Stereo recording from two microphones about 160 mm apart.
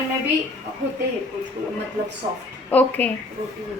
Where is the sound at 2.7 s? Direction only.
10° left (ahead or behind).